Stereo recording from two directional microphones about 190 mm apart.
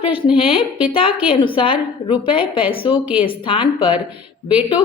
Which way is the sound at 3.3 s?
25° left (ahead or behind).